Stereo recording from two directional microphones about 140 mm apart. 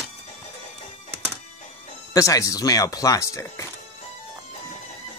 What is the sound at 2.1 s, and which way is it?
Speech, 25° left (ahead or behind).